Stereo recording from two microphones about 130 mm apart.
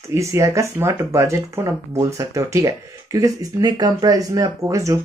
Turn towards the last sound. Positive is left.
turn(degrees=-25)  # may be behind; listen again after turning